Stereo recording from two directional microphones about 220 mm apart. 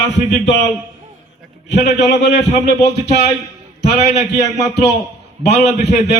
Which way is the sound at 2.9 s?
50° left (ahead or behind).